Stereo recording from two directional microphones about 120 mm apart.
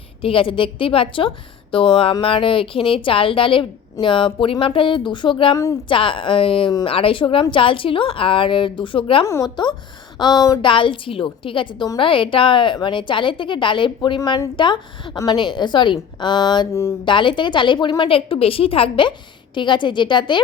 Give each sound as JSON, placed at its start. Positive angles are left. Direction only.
{"t": 0.2, "sound": "a woman's voice", "side_deg": 50}
{"t": 9.2, "sound": "a woman's voice", "side_deg": 25}
{"t": 10.6, "sound": "a woman's voice", "side_deg": 45}